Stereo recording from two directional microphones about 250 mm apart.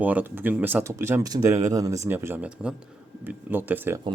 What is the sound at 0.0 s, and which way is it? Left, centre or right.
Speech, centre.